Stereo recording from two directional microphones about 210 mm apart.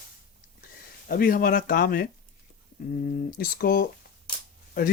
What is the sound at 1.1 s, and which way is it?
Speech, 40° left (ahead or behind).